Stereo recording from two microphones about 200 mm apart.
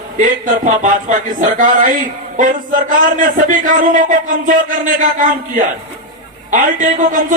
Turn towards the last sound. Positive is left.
turn(degrees=-40)  # may be behind; listen again after turning